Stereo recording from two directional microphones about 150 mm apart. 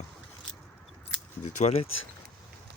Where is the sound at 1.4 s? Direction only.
50° left (ahead or behind).